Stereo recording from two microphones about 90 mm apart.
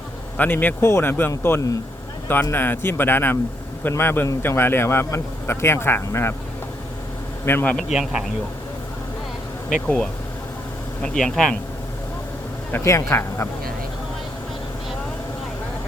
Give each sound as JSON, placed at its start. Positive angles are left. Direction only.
{"t": 0.3, "sound": "speech", "side_deg": 20}
{"t": 7.4, "sound": "speech", "side_deg": 20}
{"t": 7.8, "sound": "speech", "side_deg": -5}
{"t": 9.8, "sound": "speech", "side_deg": 10}
{"t": 12.7, "sound": "speech", "side_deg": 30}